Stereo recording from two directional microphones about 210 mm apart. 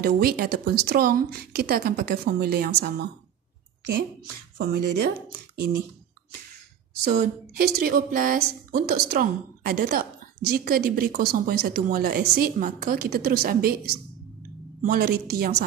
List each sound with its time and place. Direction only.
0.0 s speech: 45° right (ahead or behind)
4.6 s speech: 50° right (ahead or behind)
7.1 s speech: 45° right (ahead or behind)